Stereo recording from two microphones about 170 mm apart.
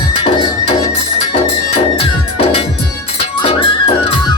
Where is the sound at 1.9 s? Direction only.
35° left (ahead or behind).